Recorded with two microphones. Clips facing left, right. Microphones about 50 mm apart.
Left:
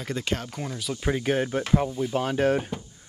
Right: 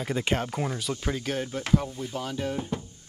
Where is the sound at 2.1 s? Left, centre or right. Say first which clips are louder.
Left 8 dB; left.